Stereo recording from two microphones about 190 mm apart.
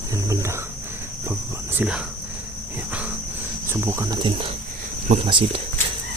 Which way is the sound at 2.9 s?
5° right (ahead or behind).